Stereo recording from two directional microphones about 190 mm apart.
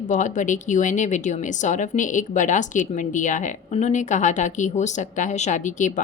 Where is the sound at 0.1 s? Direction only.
40° left (ahead or behind).